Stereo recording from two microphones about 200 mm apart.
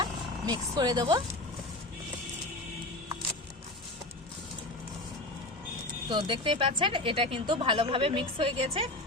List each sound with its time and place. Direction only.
0.0 s speech: 20° right (ahead or behind)
6.1 s speech: 25° right (ahead or behind)